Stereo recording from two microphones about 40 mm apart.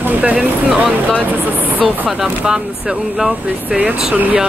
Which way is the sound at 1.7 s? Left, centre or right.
Right.